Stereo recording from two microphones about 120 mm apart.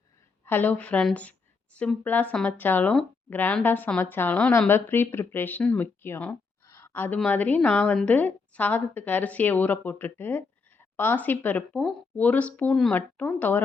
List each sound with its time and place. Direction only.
0.4 s a woman's voice: 15° left (ahead or behind)
6.7 s a sound: 20° left (ahead or behind)
7.2 s a woman's voice: 15° left (ahead or behind)